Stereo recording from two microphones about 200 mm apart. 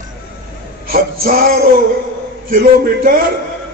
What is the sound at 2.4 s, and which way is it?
Speech, 45° right (ahead or behind).